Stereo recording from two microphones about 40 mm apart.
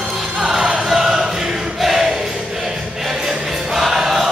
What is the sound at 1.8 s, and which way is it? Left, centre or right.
Music, centre.